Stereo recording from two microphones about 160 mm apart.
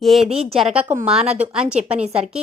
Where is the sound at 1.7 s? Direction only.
40° right (ahead or behind).